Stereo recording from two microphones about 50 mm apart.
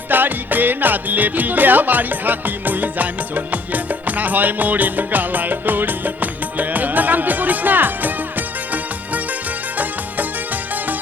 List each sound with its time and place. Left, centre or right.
0.1 s music: right